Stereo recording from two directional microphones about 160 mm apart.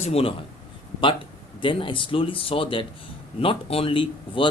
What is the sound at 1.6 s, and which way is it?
Speech, 30° left (ahead or behind).